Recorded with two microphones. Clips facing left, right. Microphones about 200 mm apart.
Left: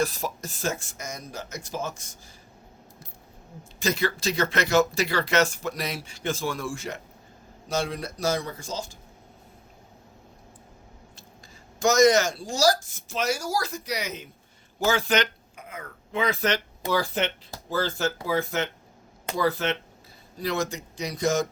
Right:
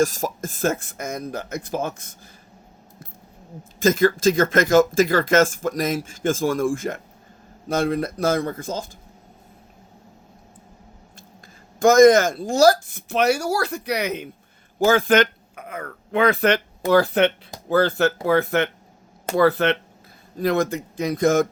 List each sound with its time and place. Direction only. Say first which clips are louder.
0.0 s speech: right 6 dB; 45° right (ahead or behind)
3.8 s speech: right 9 dB; 50° right (ahead or behind)
11.8 s speech: right 7 dB; 50° right (ahead or behind)